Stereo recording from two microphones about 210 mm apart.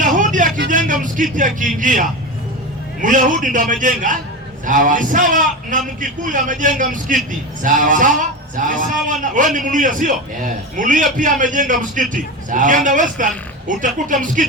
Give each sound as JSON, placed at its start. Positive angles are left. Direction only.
{"t": 0.0, "sound": "vehicle", "side_deg": -40}
{"t": 0.7, "sound": "a sound", "side_deg": -40}
{"t": 1.0, "sound": "a man's voice", "side_deg": -40}